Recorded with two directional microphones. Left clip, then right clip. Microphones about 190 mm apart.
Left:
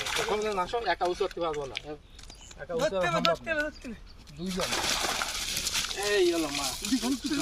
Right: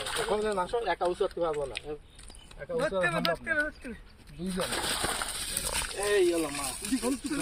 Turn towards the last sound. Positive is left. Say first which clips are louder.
# left 2 dB
turn(degrees=5)  # may be behind; listen again after turning